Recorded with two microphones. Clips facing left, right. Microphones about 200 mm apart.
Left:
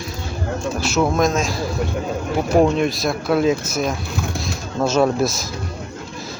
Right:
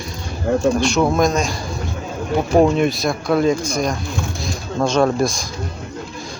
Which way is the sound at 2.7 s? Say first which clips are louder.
Right 2 dB; centre (ahead or behind).